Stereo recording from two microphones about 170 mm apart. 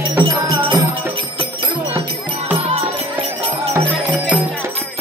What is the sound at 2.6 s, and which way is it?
Music, 35° right (ahead or behind).